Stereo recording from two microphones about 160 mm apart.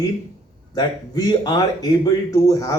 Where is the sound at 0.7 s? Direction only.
25° left (ahead or behind).